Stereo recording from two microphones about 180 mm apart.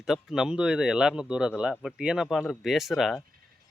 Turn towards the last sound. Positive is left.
turn(degrees=0)  # may be behind; listen again after turning